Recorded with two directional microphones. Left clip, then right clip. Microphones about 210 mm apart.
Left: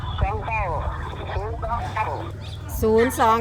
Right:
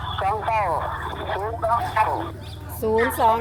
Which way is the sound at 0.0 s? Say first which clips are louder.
Right 5 dB; 25° right (ahead or behind).